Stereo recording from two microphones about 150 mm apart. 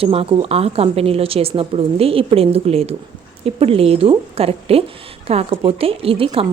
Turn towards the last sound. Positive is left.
turn(degrees=-40)  # may be behind; listen again after turning